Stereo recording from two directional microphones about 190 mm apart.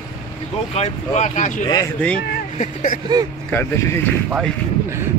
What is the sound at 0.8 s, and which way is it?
Speech, 35° left (ahead or behind).